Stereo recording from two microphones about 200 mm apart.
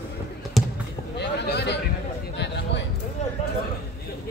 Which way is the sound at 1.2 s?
55° left (ahead or behind).